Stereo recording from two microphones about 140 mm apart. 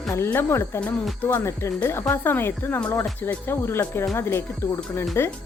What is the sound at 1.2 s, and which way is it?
Speech, 15° left (ahead or behind).